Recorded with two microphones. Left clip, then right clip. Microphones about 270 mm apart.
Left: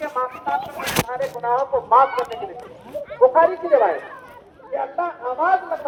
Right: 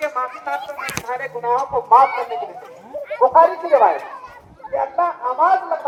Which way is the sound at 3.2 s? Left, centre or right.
Right.